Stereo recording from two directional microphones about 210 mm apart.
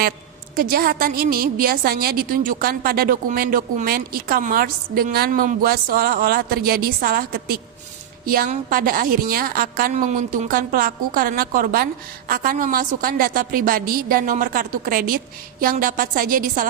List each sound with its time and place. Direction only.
0.5 s a woman's voice: 45° right (ahead or behind)